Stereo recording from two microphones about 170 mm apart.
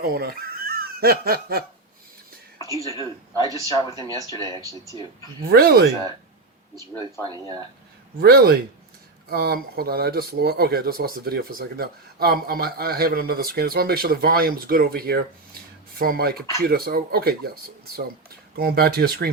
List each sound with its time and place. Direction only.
0.0 s speech: 65° right (ahead or behind)
2.8 s speech: 20° left (ahead or behind)
5.5 s speech: 65° right (ahead or behind)
7.2 s speech: 15° left (ahead or behind)
8.2 s speech: 65° right (ahead or behind)